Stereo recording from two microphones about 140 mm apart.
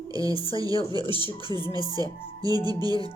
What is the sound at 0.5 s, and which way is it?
Music, 25° right (ahead or behind).